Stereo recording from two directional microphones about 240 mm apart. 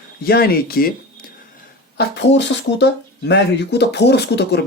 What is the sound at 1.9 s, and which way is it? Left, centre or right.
Speech, left.